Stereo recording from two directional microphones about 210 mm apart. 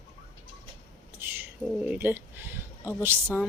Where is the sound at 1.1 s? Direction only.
10° right (ahead or behind).